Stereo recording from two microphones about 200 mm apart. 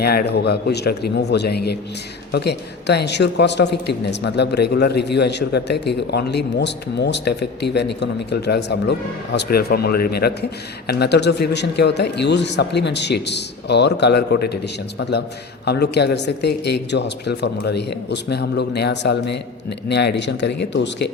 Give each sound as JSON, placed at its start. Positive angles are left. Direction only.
{"t": 0.0, "sound": "a man's voice", "side_deg": 50}